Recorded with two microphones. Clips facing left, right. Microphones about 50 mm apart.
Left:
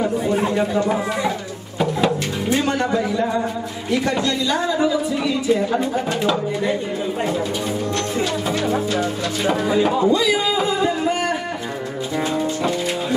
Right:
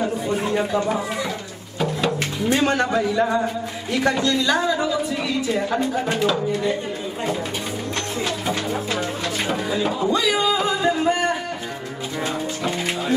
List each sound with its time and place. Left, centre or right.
1.8 s music: centre
8.6 s music: centre
9.7 s speech: centre